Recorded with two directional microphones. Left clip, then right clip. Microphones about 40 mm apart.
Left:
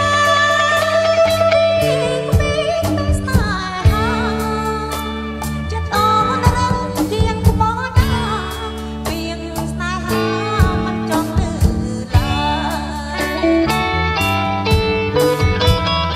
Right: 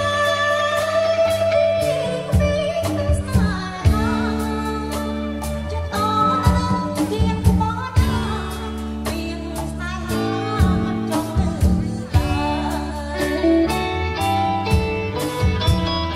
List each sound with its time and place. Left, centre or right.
0.0 s music: left
5.9 s music: left
10.1 s music: left
13.2 s music: left